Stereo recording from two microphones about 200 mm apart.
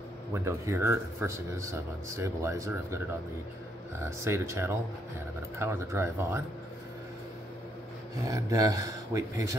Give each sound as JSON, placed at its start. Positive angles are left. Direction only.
{"t": 0.3, "sound": "speech", "side_deg": -15}
{"t": 8.3, "sound": "speech", "side_deg": -15}